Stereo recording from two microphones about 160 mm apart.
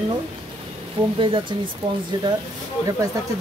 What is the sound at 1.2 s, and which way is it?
Speech, 30° right (ahead or behind).